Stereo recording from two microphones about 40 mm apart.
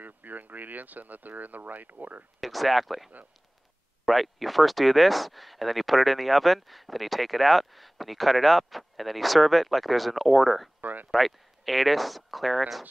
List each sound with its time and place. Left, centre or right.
0.0 s speech: right
2.4 s speech: centre
10.8 s a sound: right
11.1 s speech: centre